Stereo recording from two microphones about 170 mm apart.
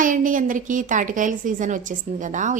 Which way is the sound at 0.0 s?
50° right (ahead or behind).